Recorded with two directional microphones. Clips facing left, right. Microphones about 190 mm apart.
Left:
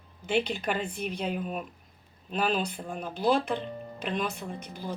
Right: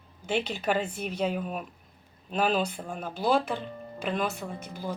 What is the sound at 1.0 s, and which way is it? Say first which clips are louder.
Speech: right 2 dB; 45° right (ahead or behind).